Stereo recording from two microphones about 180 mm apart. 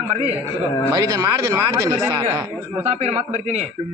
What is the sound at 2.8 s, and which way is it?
Speech, 35° right (ahead or behind).